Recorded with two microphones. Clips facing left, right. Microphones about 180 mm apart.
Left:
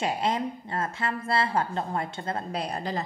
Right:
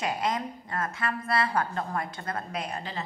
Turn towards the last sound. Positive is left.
turn(degrees=40)  # may be behind; listen again after turning